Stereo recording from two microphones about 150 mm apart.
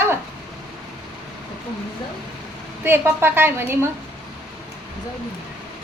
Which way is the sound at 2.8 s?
15° right (ahead or behind).